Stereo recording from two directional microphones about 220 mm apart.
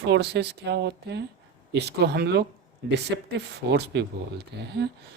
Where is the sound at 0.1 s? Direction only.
50° right (ahead or behind).